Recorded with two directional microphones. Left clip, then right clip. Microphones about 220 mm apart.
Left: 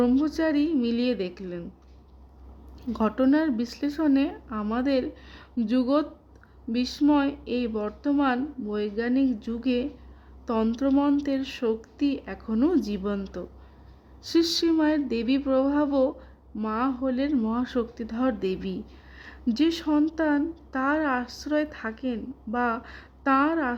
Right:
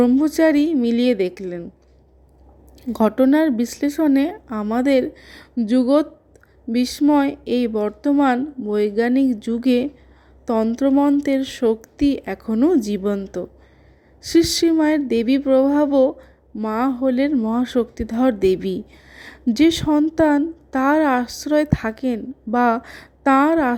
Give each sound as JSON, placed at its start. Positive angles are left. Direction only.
{"t": 0.0, "sound": "a woman's voice", "side_deg": -15}
{"t": 2.9, "sound": "a woman's voice", "side_deg": -20}
{"t": 19.9, "sound": "speech", "side_deg": -10}
{"t": 20.1, "sound": "a woman's voice", "side_deg": -20}